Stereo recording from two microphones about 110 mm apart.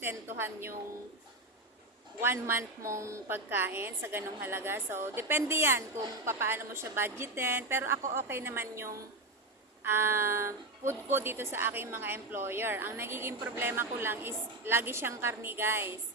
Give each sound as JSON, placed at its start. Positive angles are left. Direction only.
{"t": 0.0, "sound": "a woman's voice", "side_deg": -20}
{"t": 2.2, "sound": "a woman's voice", "side_deg": -20}